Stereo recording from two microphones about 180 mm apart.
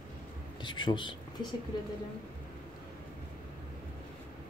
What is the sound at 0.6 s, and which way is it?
Speech, 25° left (ahead or behind).